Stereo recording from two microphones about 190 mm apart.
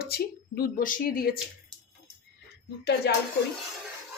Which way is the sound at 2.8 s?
60° left (ahead or behind).